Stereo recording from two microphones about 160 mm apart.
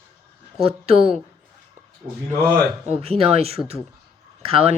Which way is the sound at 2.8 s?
40° right (ahead or behind).